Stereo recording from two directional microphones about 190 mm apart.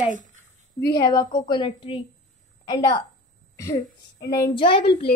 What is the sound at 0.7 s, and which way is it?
A woman's voice, 15° left (ahead or behind).